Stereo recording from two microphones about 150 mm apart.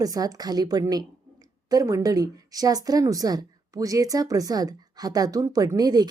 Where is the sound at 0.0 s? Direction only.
25° right (ahead or behind).